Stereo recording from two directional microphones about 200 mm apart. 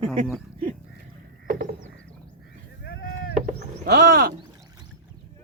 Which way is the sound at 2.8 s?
50° left (ahead or behind).